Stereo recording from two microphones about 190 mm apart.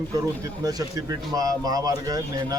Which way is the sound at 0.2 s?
20° right (ahead or behind).